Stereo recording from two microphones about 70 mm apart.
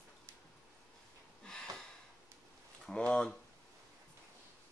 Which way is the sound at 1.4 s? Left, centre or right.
Centre.